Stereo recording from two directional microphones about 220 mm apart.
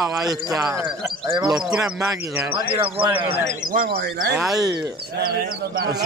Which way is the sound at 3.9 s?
45° right (ahead or behind).